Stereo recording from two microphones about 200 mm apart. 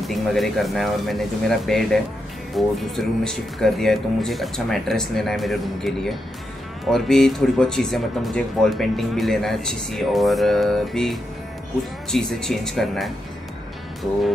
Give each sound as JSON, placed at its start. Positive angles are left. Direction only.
{"t": 0.0, "sound": "speech", "side_deg": 0}